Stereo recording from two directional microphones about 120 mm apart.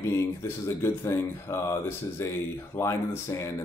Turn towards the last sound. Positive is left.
turn(degrees=25)  # may be behind; listen again after turning